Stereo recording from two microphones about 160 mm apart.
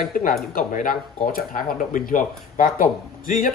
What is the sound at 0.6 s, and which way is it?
Speech, 60° left (ahead or behind).